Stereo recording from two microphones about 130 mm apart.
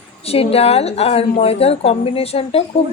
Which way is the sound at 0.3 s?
50° left (ahead or behind).